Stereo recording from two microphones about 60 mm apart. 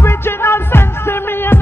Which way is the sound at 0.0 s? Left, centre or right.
Left.